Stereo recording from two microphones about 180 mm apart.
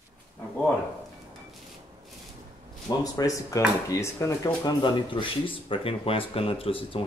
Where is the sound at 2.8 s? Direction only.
20° left (ahead or behind).